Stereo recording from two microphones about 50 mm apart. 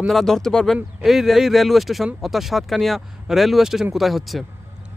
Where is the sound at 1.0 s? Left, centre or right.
Centre.